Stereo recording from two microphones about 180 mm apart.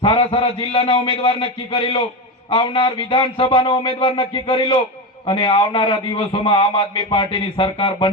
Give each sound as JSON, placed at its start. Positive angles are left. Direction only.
{"t": 0.0, "sound": "a man's voice", "side_deg": 30}